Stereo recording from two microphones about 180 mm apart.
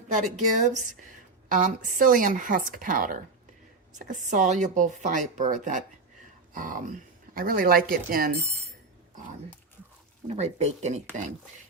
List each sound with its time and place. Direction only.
0.6 s speech: 45° right (ahead or behind)
10.2 s speech: 40° right (ahead or behind)